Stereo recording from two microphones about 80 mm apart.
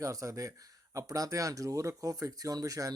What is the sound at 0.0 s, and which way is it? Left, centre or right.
Speech, right.